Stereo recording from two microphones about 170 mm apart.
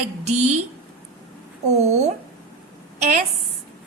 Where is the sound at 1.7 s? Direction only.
40° right (ahead or behind).